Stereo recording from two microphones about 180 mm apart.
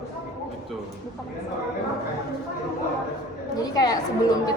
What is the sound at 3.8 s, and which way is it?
Speech, 20° left (ahead or behind).